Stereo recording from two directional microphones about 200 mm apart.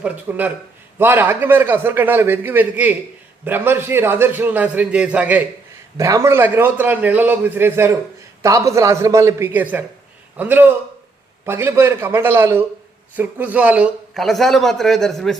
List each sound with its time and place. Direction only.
0.0 s a man's voice: 10° right (ahead or behind)